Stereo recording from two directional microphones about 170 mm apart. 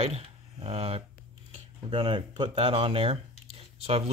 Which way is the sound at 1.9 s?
30° right (ahead or behind).